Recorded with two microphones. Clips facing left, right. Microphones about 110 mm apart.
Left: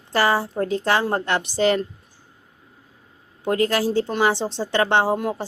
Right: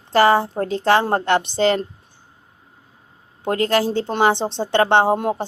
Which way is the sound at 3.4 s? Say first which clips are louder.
Right 2 dB; 30° right (ahead or behind).